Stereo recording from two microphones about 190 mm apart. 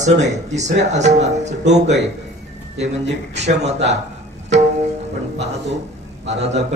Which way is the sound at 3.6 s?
35° right (ahead or behind).